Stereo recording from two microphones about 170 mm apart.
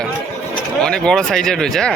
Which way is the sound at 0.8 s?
5° left (ahead or behind).